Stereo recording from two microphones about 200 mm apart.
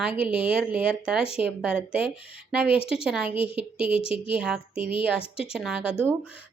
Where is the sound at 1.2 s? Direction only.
30° left (ahead or behind).